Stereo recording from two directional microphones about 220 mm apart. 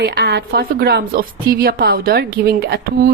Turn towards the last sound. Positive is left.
turn(degrees=-45)  # may be behind; listen again after turning